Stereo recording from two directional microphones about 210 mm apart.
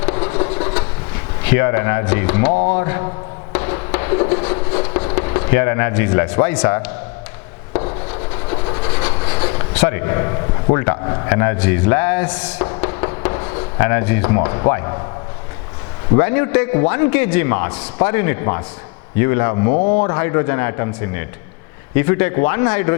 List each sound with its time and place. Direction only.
0.0 s train: 20° left (ahead or behind)
1.5 s a man's voice: 15° left (ahead or behind)
3.5 s fireworks: 15° left (ahead or behind)
7.7 s rub: 25° left (ahead or behind)
8.4 s train: 25° left (ahead or behind)
9.7 s a man's voice: 10° left (ahead or behind)
12.9 s a sound: 20° left (ahead or behind)
13.7 s a man's voice: 15° left (ahead or behind)
16.1 s a man's voice: 15° left (ahead or behind)
19.7 s speech: 40° left (ahead or behind)
20.1 s a man's voice: 15° left (ahead or behind)